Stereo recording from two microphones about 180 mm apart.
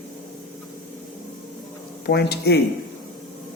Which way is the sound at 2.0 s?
65° left (ahead or behind).